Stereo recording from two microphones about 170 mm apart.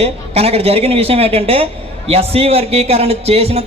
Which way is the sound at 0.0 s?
35° right (ahead or behind).